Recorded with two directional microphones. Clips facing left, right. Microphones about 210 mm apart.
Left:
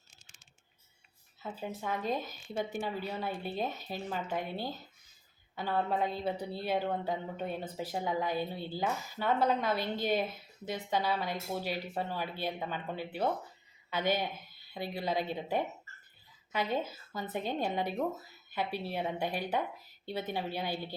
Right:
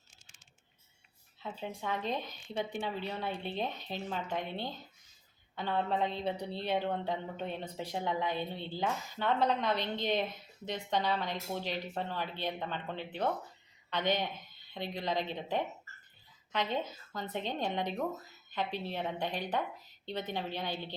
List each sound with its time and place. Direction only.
1.4 s a woman's voice: 5° left (ahead or behind)